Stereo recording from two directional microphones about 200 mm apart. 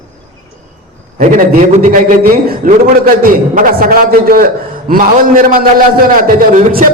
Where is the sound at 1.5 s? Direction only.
40° right (ahead or behind).